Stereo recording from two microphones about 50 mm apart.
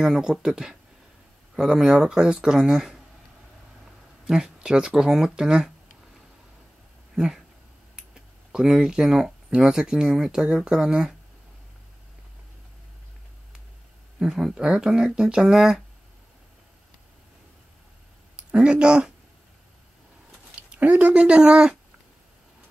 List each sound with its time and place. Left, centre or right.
0.0 s speech: centre
4.3 s speech: centre
8.1 s speech: centre
14.2 s speech: centre
18.3 s speech: centre
20.7 s speech: right
21.4 s speech: centre